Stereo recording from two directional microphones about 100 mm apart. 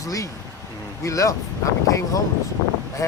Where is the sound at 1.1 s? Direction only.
35° left (ahead or behind).